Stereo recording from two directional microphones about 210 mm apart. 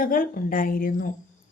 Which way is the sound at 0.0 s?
45° left (ahead or behind).